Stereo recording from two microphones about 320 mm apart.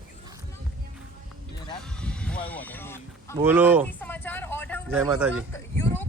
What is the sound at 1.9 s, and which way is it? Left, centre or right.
Music, centre.